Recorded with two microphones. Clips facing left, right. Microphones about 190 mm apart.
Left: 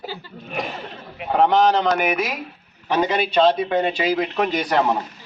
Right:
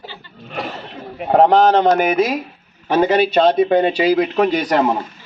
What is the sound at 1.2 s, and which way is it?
Speech, 40° right (ahead or behind).